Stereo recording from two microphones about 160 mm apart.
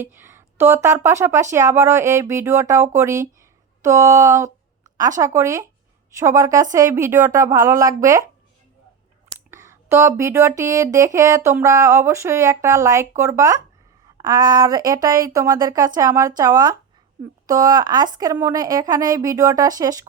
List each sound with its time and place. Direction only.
0.0 s speech: 15° right (ahead or behind)
9.5 s a sound: 15° right (ahead or behind)
10.6 s speech: 20° right (ahead or behind)